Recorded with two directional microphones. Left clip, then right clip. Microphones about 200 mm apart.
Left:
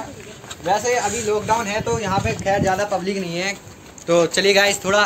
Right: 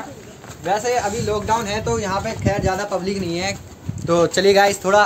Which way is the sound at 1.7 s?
60° right (ahead or behind).